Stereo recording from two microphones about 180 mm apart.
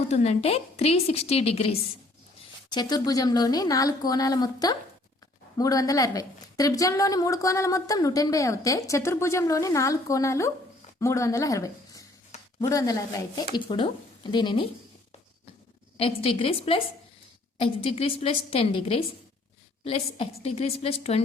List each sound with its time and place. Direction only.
0.1 s a woman's voice: 40° left (ahead or behind)
2.6 s a woman's voice: 25° left (ahead or behind)
16.0 s a woman's voice: 30° left (ahead or behind)